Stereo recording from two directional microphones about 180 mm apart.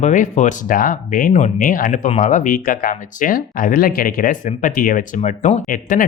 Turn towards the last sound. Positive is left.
turn(degrees=45)  # may be behind; listen again after turning